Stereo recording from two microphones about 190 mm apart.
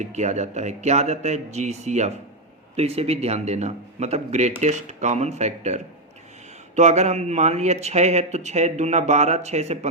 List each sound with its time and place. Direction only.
0.0 s speech: 40° right (ahead or behind)